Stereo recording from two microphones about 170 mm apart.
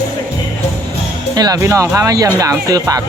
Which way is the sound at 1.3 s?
20° right (ahead or behind).